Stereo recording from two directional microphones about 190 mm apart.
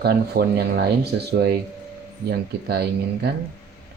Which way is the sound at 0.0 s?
55° right (ahead or behind).